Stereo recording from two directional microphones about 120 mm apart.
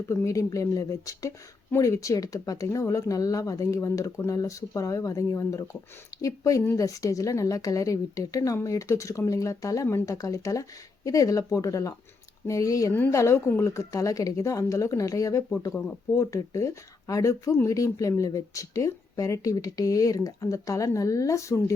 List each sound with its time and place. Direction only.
0.1 s speech: 25° left (ahead or behind)